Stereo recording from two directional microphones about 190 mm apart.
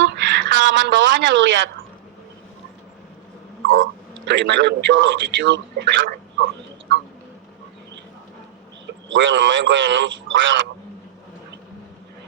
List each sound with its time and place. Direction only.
0.0 s a sound: 65° right (ahead or behind)
4.3 s a man's voice: 65° right (ahead or behind)
8.9 s a man's voice: 80° right